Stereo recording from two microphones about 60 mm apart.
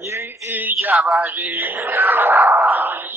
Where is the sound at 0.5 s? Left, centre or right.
Right.